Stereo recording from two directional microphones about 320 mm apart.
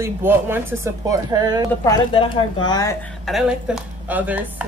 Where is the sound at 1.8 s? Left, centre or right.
Centre.